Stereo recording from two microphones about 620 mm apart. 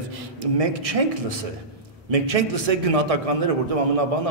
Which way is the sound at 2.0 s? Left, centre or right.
Right.